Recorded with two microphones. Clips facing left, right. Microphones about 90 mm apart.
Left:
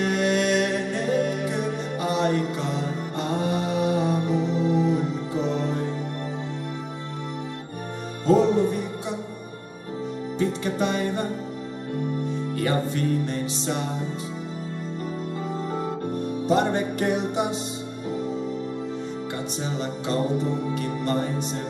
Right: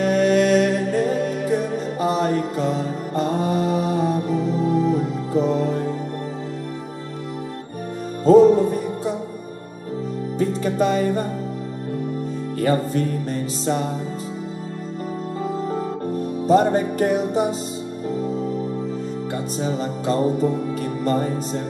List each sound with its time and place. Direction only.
0.0 s music: 40° right (ahead or behind)
8.3 s music: 40° right (ahead or behind)
10.4 s music: 40° right (ahead or behind)
12.5 s music: 40° right (ahead or behind)
16.2 s music: 40° right (ahead or behind)
19.6 s music: 40° right (ahead or behind)